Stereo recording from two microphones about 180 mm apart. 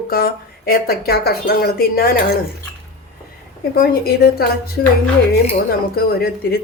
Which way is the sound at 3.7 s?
55° left (ahead or behind).